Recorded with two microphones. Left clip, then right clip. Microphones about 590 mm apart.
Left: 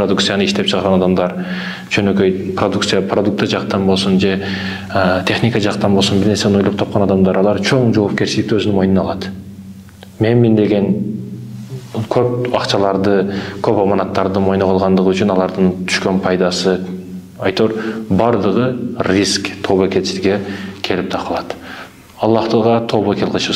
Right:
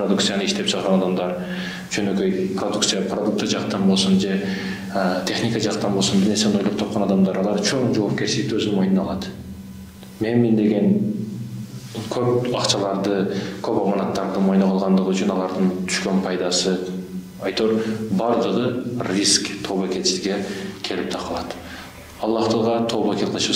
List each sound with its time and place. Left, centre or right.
0.1 s speech: left
12.1 s a man's voice: left